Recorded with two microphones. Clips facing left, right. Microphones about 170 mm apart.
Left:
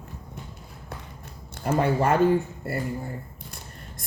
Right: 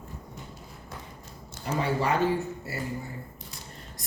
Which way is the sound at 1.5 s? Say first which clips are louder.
Left 5 dB; 55° left (ahead or behind).